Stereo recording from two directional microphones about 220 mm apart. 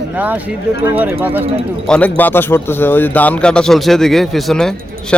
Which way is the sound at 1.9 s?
5° left (ahead or behind).